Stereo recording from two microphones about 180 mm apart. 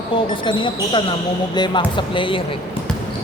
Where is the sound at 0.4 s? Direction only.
25° left (ahead or behind).